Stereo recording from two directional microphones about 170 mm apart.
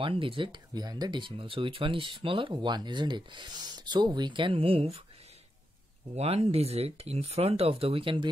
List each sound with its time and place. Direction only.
0.0 s speech: 30° right (ahead or behind)
6.1 s speech: 35° right (ahead or behind)